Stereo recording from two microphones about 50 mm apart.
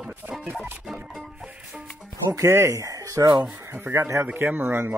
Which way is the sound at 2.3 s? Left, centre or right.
Right.